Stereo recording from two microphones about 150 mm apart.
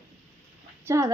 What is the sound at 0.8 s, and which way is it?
Speech, 20° right (ahead or behind).